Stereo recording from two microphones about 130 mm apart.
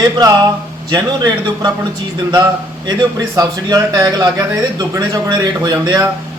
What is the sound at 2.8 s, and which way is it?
A man's voice, 30° right (ahead or behind).